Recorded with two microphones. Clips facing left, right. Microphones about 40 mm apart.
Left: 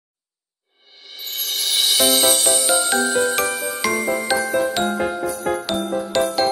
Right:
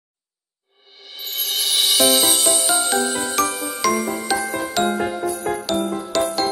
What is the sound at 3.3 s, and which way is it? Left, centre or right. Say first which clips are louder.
Jingle: even; left.